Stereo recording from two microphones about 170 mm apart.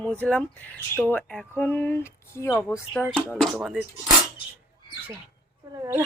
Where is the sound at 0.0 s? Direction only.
5° left (ahead or behind).